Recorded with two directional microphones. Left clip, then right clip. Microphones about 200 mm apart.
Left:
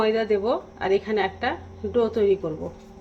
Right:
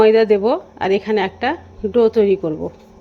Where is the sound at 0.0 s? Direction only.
45° right (ahead or behind).